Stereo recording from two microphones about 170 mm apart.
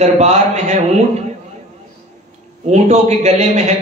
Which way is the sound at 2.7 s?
40° right (ahead or behind).